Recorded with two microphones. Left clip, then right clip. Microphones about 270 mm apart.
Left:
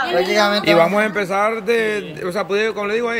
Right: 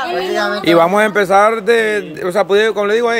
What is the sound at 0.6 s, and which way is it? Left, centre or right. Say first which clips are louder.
Speech: right 3 dB; centre.